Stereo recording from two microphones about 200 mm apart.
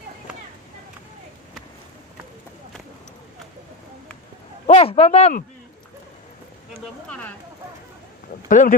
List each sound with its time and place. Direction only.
4.6 s speech: 30° left (ahead or behind)
7.1 s speech: 10° left (ahead or behind)
8.5 s speech: 40° left (ahead or behind)